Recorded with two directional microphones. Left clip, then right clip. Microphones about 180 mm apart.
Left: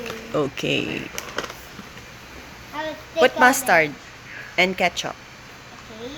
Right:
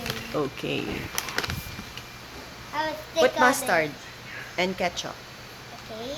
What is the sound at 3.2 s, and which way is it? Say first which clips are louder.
Speech: left 4 dB; 25° left (ahead or behind).